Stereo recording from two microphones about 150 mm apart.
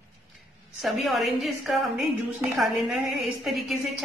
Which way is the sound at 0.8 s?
Centre (ahead or behind).